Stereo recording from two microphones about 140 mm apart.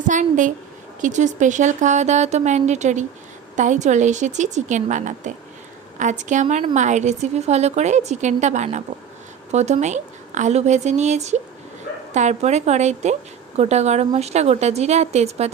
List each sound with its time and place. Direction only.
0.1 s speech: 65° right (ahead or behind)